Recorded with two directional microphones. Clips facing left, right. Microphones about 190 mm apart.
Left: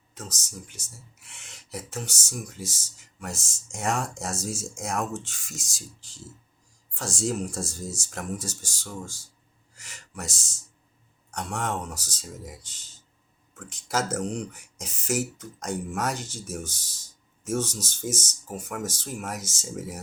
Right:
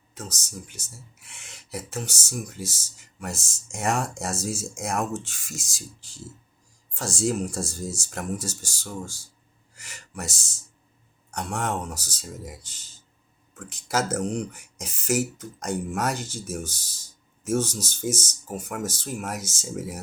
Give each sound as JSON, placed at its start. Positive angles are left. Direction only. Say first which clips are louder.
{"t": 0.1, "sound": "speech", "louder": "right 2 dB", "side_deg": -5}